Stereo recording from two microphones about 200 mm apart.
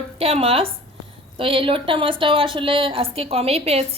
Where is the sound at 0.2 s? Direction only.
30° right (ahead or behind).